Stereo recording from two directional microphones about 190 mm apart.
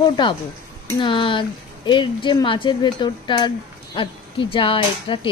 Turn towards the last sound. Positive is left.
turn(degrees=25)  # may be behind; listen again after turning